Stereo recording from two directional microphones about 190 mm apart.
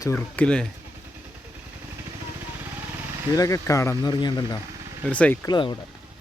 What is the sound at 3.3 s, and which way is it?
Speech, 15° left (ahead or behind).